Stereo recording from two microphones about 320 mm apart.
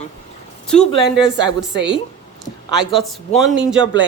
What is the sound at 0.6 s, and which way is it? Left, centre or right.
Speech, centre.